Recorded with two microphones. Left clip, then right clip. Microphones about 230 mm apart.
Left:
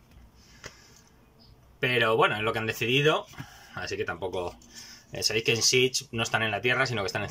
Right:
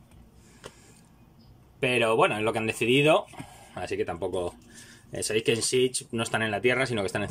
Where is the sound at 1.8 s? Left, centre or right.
Centre.